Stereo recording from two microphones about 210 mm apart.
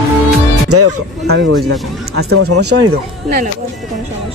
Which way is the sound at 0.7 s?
90° right.